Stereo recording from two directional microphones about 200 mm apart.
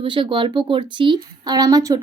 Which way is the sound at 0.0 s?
25° right (ahead or behind).